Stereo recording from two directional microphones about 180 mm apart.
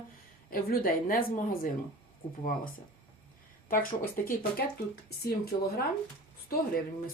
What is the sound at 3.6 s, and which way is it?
Speech, 50° left (ahead or behind).